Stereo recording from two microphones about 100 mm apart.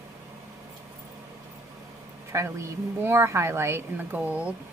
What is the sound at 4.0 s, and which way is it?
Speech, 15° right (ahead or behind).